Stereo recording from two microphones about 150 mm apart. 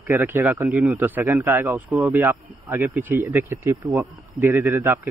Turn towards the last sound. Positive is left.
turn(degrees=-15)  # may be behind; listen again after turning